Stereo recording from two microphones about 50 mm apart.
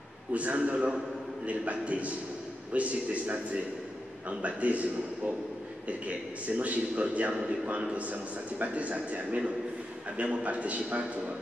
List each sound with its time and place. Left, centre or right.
0.3 s a man's voice: right